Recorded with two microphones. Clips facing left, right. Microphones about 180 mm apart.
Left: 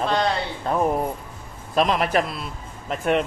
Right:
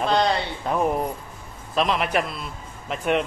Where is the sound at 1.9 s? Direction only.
5° right (ahead or behind).